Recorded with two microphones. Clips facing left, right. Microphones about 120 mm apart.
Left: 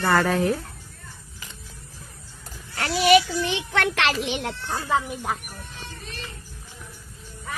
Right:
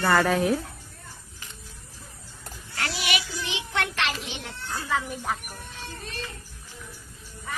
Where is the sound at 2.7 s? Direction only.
35° left (ahead or behind); by 4.8 s 80° left.